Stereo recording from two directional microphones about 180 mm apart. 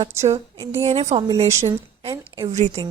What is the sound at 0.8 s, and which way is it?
Speech, 35° right (ahead or behind).